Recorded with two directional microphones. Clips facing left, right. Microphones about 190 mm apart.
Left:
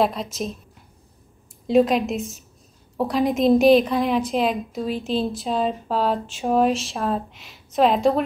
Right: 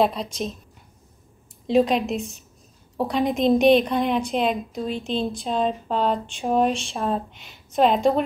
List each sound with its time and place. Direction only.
0.0 s a woman's voice: centre (ahead or behind)
1.7 s a woman's voice: centre (ahead or behind)